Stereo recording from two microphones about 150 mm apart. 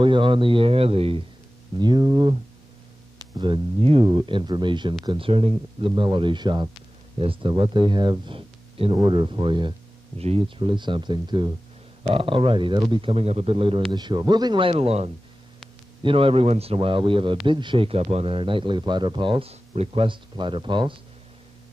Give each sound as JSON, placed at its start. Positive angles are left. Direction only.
{"t": 0.0, "sound": "speech", "side_deg": -35}
{"t": 1.8, "sound": "speech", "side_deg": -30}
{"t": 3.3, "sound": "speech", "side_deg": -30}